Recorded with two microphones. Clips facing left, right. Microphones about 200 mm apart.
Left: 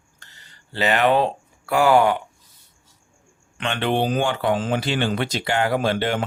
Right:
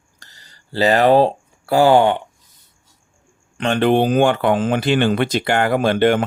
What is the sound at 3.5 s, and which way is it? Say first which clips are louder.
Speech: right 7 dB; 40° right (ahead or behind).